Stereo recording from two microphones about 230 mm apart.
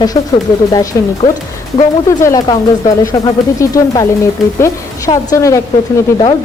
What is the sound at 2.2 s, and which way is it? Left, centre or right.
Speech, centre.